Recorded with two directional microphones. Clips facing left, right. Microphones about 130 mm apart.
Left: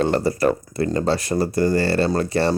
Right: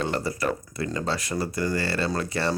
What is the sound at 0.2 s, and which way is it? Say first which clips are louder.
Speech: left 8 dB; 35° left (ahead or behind).